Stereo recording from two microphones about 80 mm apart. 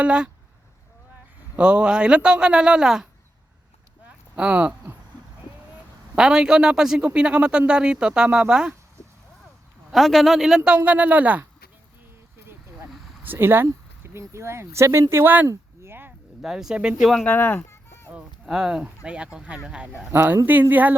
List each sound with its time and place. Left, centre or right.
0.0 s a man's voice: centre
1.5 s a man's voice: centre
4.4 s a man's voice: centre
6.1 s a man's voice: centre
9.9 s speech: centre
10.6 s a man's voice: centre
13.2 s speech: right
15.1 s speech: right
15.4 s a sound: right
16.4 s a man's voice: centre
17.2 s chicken: left
18.1 s a sound: centre
19.0 s a man's voice: centre
20.1 s speech: right